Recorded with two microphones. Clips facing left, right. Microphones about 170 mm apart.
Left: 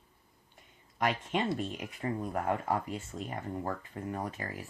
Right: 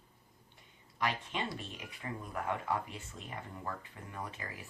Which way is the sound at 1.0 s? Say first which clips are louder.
Left 5 dB; 45° left (ahead or behind).